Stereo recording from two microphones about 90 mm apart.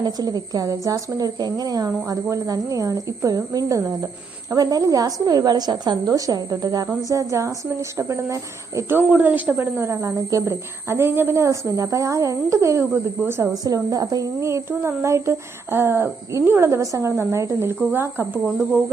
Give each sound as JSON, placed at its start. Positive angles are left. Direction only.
{"t": 0.0, "sound": "a woman's voice", "side_deg": -45}
{"t": 7.1, "sound": "a woman's voice", "side_deg": -35}
{"t": 9.0, "sound": "a woman's voice", "side_deg": -15}
{"t": 13.7, "sound": "a woman's voice", "side_deg": -40}